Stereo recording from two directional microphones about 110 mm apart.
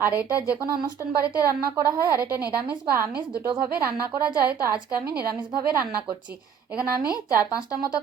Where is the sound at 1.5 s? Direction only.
30° right (ahead or behind).